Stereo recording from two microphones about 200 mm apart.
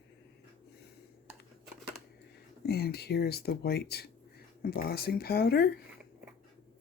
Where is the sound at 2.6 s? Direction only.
55° left (ahead or behind).